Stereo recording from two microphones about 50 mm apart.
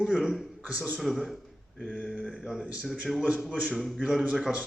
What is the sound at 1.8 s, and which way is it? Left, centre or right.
Mantra, centre.